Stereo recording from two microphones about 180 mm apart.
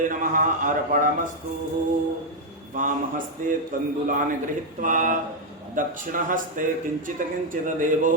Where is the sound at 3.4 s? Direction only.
45° right (ahead or behind).